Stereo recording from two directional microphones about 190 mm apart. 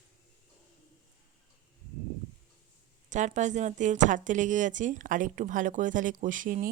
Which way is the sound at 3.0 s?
40° right (ahead or behind).